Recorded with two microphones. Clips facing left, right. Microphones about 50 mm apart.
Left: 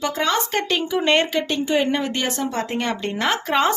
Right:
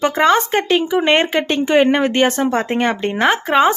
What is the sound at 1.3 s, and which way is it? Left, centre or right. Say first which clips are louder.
Speech: right 5 dB; right.